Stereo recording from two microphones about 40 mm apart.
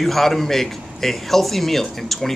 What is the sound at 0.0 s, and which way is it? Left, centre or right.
Speech, centre.